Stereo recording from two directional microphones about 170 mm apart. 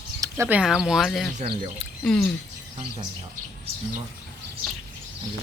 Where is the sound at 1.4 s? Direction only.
35° right (ahead or behind).